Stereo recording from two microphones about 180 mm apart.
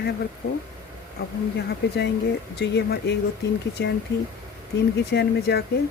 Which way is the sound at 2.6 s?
70° left (ahead or behind).